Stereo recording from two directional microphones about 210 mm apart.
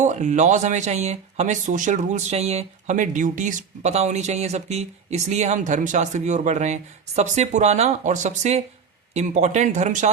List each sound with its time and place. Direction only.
0.0 s speech: 35° right (ahead or behind)